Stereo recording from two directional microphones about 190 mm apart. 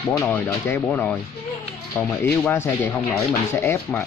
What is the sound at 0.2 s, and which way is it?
Speech, 10° left (ahead or behind).